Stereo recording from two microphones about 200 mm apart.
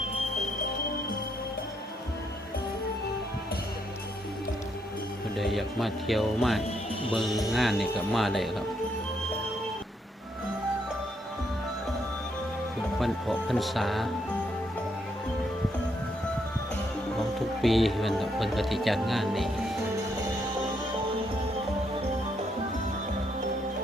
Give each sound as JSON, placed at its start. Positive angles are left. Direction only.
{"t": 5.4, "sound": "speech", "side_deg": 0}
{"t": 7.3, "sound": "speech", "side_deg": 15}
{"t": 7.5, "sound": "speech", "side_deg": 0}
{"t": 13.0, "sound": "speech", "side_deg": 0}
{"t": 17.2, "sound": "speech", "side_deg": 0}